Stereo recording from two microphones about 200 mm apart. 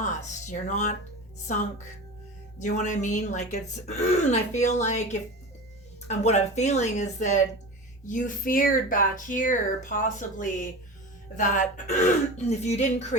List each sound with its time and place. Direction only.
0.0 s speech: 40° left (ahead or behind)
2.6 s speech: 40° left (ahead or behind)